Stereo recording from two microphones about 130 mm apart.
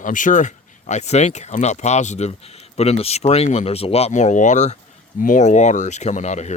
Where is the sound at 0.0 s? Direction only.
85° left; by 4.8 s 65° left (ahead or behind).